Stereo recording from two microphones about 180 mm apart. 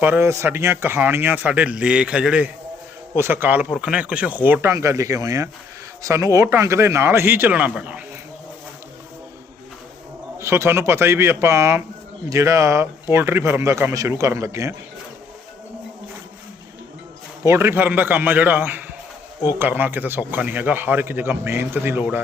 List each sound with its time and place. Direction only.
0.0 s speech: 15° right (ahead or behind)
10.3 s speech: 15° right (ahead or behind)
17.4 s speech: 15° right (ahead or behind)